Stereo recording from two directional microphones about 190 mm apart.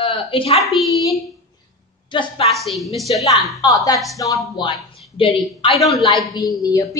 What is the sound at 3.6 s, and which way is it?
Speech, 20° left (ahead or behind).